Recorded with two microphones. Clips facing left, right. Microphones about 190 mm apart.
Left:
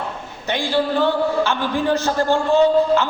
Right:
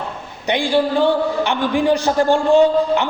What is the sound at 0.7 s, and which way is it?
A man's voice, 15° right (ahead or behind).